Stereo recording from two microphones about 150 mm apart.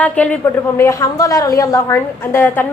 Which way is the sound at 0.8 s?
20° left (ahead or behind).